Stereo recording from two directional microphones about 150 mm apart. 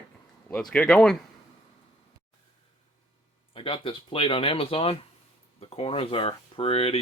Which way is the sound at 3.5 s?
35° left (ahead or behind).